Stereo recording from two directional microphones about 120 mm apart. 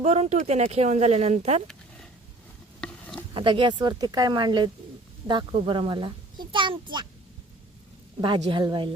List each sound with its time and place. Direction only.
0.0 s speech: 65° right (ahead or behind)
3.3 s a woman's voice: 45° right (ahead or behind)
8.2 s a woman's voice: 40° right (ahead or behind)